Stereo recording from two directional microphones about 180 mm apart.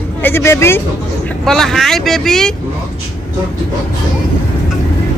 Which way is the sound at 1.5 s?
Centre (ahead or behind).